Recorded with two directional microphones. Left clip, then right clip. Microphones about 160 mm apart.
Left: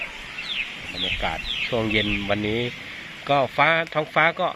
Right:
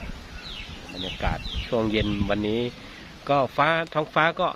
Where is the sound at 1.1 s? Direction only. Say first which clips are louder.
Left 5 dB; 10° right (ahead or behind).